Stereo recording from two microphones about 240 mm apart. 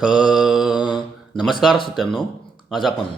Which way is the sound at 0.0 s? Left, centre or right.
Centre.